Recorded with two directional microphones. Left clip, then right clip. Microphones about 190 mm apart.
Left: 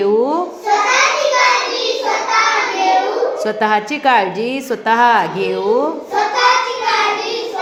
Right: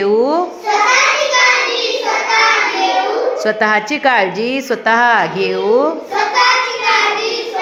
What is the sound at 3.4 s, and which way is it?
A woman's voice, 10° right (ahead or behind).